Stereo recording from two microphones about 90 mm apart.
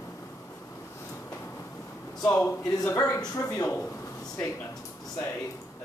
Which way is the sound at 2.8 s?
35° left (ahead or behind).